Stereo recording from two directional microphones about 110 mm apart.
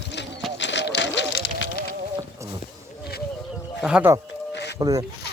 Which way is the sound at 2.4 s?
25° right (ahead or behind).